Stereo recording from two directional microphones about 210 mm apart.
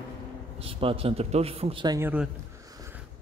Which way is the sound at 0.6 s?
25° right (ahead or behind).